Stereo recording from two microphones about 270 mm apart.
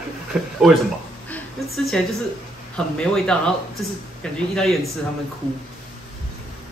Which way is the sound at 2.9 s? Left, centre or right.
Centre.